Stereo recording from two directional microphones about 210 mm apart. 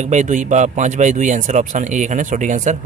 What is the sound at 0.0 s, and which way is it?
A man's voice, 35° right (ahead or behind).